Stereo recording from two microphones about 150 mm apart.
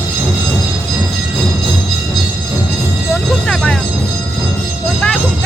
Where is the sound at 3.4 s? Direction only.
5° left (ahead or behind).